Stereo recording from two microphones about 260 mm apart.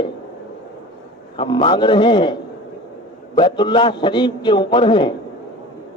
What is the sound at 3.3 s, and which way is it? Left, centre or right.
A man's voice, centre.